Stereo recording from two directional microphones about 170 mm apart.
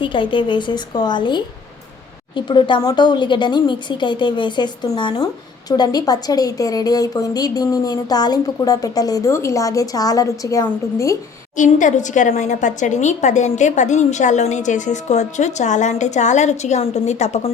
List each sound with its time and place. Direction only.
0.0 s a woman's voice: 30° left (ahead or behind)
11.5 s a woman's voice: 45° left (ahead or behind)